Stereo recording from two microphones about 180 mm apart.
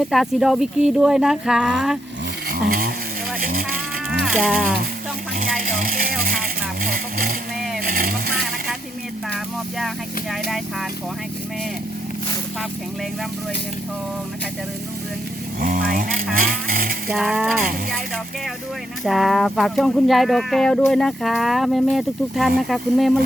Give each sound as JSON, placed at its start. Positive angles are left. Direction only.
{"t": 0.0, "sound": "speech", "side_deg": 0}
{"t": 2.5, "sound": "insect", "side_deg": -55}
{"t": 4.2, "sound": "speech", "side_deg": 0}
{"t": 5.4, "sound": "speech", "side_deg": -50}
{"t": 9.3, "sound": "speech", "side_deg": 0}
{"t": 15.6, "sound": "speech", "side_deg": -50}
{"t": 17.2, "sound": "speech", "side_deg": -5}
{"t": 19.0, "sound": "speech", "side_deg": 0}